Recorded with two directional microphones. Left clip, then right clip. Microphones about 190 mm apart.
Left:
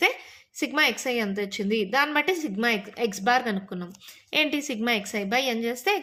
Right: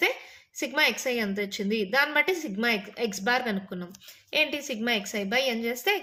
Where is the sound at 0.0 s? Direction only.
25° left (ahead or behind).